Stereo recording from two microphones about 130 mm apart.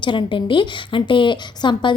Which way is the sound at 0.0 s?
40° left (ahead or behind).